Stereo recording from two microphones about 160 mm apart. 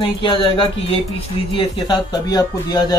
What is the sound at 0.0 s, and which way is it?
Speech, 30° left (ahead or behind).